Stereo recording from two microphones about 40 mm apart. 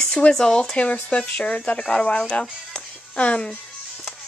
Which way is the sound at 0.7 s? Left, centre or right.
Left.